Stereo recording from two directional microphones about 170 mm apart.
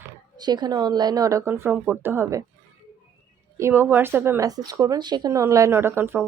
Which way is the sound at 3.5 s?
15° right (ahead or behind).